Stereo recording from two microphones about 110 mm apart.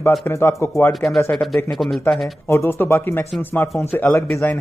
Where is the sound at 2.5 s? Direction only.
20° left (ahead or behind).